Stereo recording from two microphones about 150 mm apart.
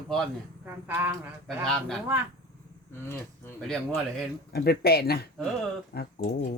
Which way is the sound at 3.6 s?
Centre (ahead or behind).